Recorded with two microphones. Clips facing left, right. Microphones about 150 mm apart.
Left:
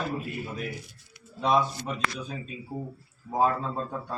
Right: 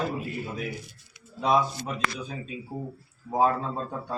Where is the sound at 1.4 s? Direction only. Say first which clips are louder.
Right 1 dB; 5° right (ahead or behind).